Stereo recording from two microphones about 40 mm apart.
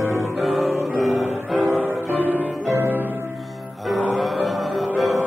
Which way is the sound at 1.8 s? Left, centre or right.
Right.